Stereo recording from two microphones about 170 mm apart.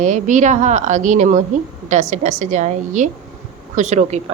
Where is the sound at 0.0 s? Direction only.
45° right (ahead or behind).